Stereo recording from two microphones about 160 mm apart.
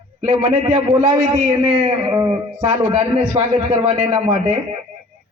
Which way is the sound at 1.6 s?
35° right (ahead or behind).